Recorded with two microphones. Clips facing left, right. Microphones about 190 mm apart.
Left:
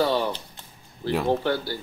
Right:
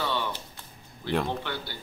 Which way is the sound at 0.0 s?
40° left (ahead or behind).